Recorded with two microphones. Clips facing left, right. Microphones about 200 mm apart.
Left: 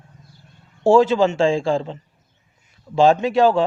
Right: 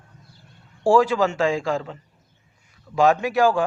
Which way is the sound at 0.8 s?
25° left (ahead or behind).